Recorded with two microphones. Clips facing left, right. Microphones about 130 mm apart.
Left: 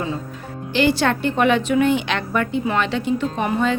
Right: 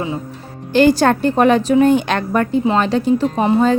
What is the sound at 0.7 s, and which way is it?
Speech, 45° right (ahead or behind).